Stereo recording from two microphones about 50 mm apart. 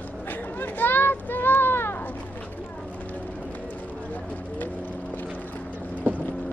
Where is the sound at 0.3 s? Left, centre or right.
Left.